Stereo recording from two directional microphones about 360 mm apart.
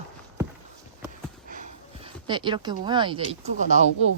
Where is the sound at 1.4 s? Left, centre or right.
Right.